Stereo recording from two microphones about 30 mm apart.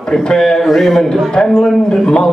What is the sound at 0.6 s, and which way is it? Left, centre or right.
Speech, centre.